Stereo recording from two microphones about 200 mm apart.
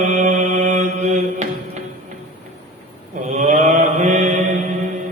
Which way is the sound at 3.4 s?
35° right (ahead or behind).